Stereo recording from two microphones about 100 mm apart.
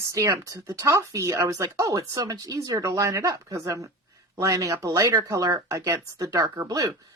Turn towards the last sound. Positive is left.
turn(degrees=-35)  # may be behind; listen again after turning